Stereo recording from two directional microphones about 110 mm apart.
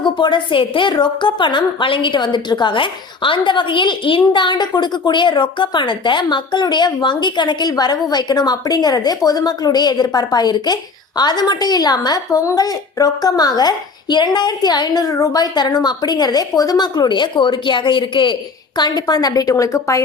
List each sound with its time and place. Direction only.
0.0 s a woman's voice: 45° left (ahead or behind); by 20.0 s 30° left (ahead or behind)